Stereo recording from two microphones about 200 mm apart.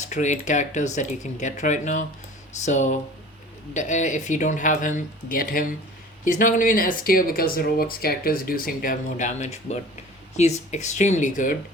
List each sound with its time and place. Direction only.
0.1 s speech: 35° left (ahead or behind)